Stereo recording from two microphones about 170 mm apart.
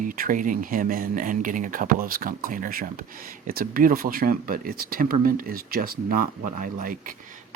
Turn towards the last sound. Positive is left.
turn(degrees=-55)  # may be behind; listen again after turning